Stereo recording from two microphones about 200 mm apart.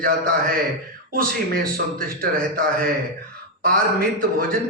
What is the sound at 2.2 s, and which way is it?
A man's voice, 45° right (ahead or behind).